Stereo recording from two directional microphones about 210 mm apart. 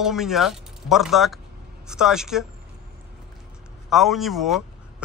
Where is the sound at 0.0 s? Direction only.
Centre (ahead or behind).